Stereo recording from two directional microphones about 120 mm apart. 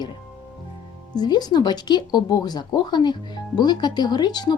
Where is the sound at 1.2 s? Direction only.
35° left (ahead or behind).